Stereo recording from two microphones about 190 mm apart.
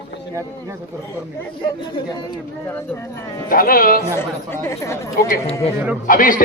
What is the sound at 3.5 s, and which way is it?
Speech, 50° left (ahead or behind).